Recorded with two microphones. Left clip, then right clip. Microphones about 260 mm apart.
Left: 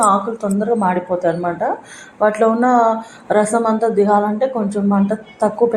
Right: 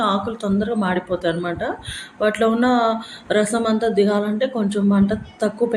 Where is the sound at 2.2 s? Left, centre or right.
Centre.